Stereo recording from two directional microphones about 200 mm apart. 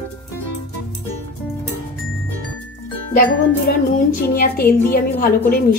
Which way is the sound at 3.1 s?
40° left (ahead or behind).